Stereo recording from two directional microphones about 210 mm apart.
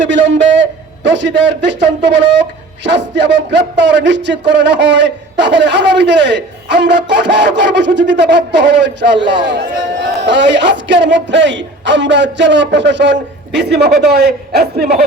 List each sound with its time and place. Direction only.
0.0 s a man's voice: 60° right (ahead or behind)
10.2 s a man's voice: 55° right (ahead or behind)